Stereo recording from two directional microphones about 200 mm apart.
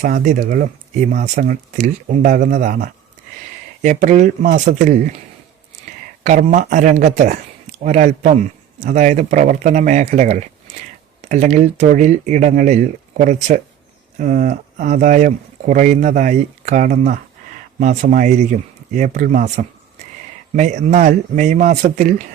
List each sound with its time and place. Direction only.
0.0 s speech: 40° right (ahead or behind)
6.2 s speech: 40° right (ahead or behind)